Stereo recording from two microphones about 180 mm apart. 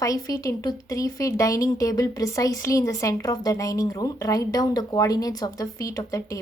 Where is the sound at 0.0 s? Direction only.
20° left (ahead or behind).